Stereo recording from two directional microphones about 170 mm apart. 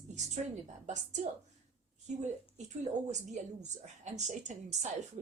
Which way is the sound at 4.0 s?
45° right (ahead or behind).